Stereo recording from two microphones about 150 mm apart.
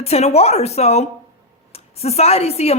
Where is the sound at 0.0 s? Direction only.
45° left (ahead or behind).